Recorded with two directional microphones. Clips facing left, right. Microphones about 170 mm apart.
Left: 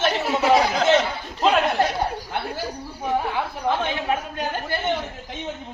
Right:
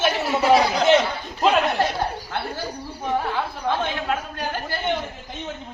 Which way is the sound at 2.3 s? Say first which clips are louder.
Left 1 dB; 10° left (ahead or behind).